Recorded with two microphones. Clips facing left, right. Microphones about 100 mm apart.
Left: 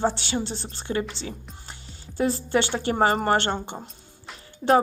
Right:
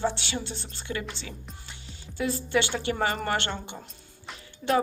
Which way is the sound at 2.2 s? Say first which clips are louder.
Left 4 dB; 35° left (ahead or behind).